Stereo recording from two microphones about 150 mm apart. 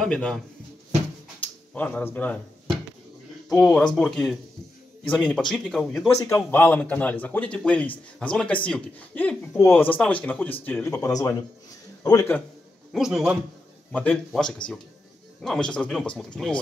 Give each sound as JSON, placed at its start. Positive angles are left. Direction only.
{"t": 0.0, "sound": "speech", "side_deg": 5}
{"t": 1.4, "sound": "speech", "side_deg": 10}
{"t": 3.6, "sound": "speech", "side_deg": 5}
{"t": 6.0, "sound": "a man's voice", "side_deg": 20}
{"t": 12.9, "sound": "speech", "side_deg": -5}